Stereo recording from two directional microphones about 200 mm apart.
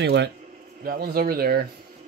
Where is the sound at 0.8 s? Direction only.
45° right (ahead or behind).